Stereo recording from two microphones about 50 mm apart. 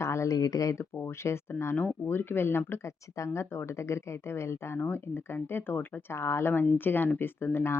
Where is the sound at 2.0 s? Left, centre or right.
Left.